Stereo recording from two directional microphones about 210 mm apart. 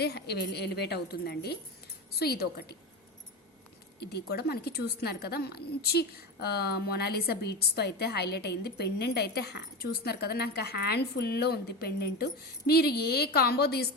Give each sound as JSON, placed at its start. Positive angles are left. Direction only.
{"t": 0.0, "sound": "a woman's voice", "side_deg": 50}
{"t": 4.0, "sound": "a woman's voice", "side_deg": 50}